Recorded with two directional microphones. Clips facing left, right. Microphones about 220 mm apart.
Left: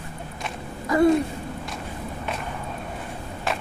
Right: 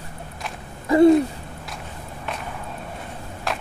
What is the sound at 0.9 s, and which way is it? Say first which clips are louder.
Speech: right 5 dB; 25° right (ahead or behind).